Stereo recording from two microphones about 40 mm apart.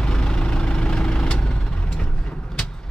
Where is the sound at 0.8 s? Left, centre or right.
Left.